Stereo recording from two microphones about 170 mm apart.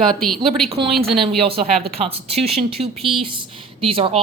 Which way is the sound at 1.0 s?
Centre (ahead or behind).